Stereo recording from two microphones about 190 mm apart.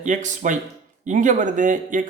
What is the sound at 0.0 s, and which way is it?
Speech, 40° right (ahead or behind).